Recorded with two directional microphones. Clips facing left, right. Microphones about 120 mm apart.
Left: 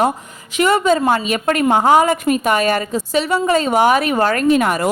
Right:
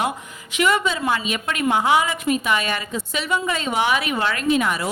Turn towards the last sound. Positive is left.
turn(degrees=50)  # may be behind; listen again after turning